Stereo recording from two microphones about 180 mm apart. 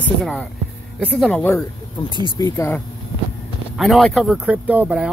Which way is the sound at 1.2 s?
10° left (ahead or behind).